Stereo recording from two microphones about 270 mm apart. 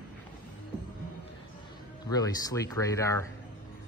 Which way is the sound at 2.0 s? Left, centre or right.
Centre.